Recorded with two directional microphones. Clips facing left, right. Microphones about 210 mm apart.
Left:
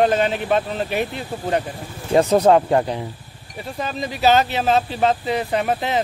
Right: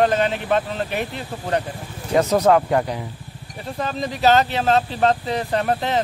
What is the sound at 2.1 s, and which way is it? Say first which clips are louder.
Speech: left 2 dB; 30° left (ahead or behind).